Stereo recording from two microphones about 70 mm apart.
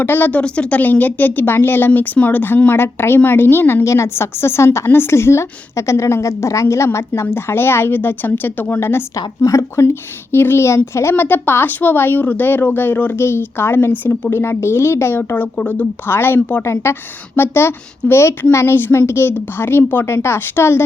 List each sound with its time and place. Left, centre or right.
0.0 s speech: left
1.9 s speech: left
9.1 s a woman's voice: left
9.8 s speech: left
11.1 s speech: left
15.5 s speech: left
16.0 s speech: left